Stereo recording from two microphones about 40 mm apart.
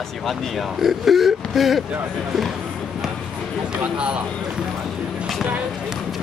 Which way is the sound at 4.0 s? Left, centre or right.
Right.